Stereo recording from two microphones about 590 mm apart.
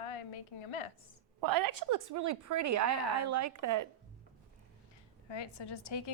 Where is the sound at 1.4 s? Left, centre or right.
Right.